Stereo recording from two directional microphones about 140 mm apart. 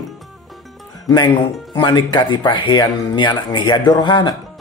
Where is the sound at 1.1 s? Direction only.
35° left (ahead or behind).